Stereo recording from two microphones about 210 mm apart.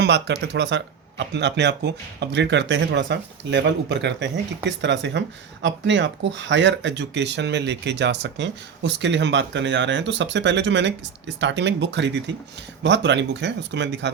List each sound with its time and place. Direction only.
0.0 s speech: 55° right (ahead or behind)